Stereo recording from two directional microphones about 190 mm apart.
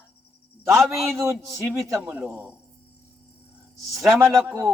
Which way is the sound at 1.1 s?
15° right (ahead or behind).